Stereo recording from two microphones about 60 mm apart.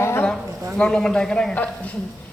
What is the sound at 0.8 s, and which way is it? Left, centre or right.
Speech, centre.